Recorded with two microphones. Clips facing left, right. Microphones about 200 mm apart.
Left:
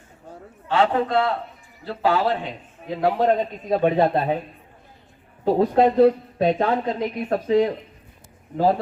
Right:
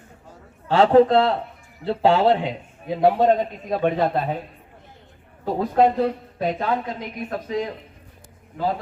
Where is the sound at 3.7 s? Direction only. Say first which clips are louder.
Left 3 dB; 15° left (ahead or behind).